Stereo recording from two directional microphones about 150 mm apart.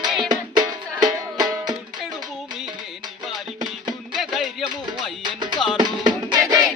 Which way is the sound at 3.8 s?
Centre (ahead or behind).